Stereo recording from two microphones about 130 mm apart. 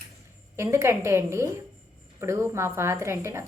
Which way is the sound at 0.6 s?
20° right (ahead or behind).